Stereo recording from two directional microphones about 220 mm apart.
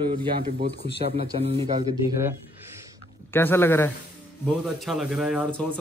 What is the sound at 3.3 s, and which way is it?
Speech, 10° left (ahead or behind).